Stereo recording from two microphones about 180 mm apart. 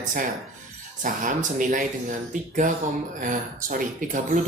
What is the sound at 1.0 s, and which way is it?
Speech, 45° right (ahead or behind).